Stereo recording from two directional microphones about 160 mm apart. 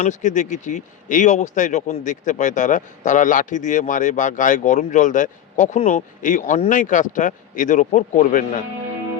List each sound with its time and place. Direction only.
0.0 s speech: 50° left (ahead or behind)